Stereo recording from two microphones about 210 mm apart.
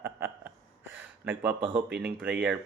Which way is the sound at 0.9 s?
10° right (ahead or behind).